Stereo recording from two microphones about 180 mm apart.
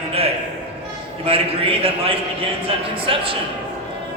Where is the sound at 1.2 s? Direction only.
30° right (ahead or behind).